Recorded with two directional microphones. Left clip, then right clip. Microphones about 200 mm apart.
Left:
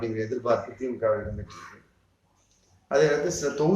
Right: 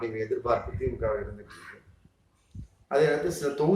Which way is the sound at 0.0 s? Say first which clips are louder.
Left 1 dB; 5° right (ahead or behind).